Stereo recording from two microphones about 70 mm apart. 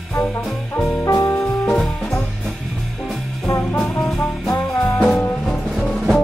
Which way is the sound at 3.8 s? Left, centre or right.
Centre.